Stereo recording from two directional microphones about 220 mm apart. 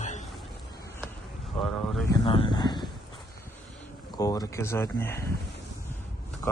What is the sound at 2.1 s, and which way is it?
Speech, 25° left (ahead or behind).